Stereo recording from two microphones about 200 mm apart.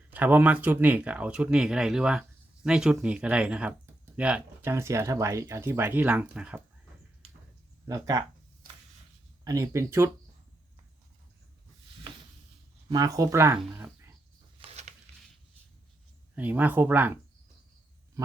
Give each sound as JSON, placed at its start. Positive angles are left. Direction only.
{"t": 0.1, "sound": "speech", "side_deg": -10}
{"t": 7.9, "sound": "speech", "side_deg": -15}
{"t": 9.4, "sound": "speech", "side_deg": -15}
{"t": 12.9, "sound": "speech", "side_deg": -15}
{"t": 14.6, "sound": "a sound", "side_deg": -35}
{"t": 16.3, "sound": "speech", "side_deg": -10}